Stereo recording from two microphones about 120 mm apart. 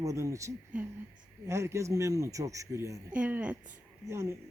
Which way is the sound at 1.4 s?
25° right (ahead or behind).